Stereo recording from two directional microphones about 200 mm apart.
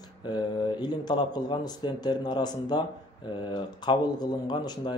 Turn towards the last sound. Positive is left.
turn(degrees=20)  # may be behind; listen again after turning